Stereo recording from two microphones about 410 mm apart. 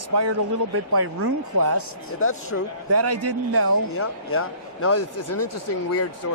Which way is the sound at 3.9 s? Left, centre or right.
Left.